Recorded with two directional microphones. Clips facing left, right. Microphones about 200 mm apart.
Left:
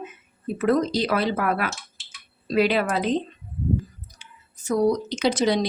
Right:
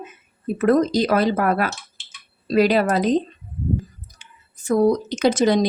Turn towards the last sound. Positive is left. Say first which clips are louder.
# right 4 dB
turn(degrees=-50)  # may be behind; listen again after turning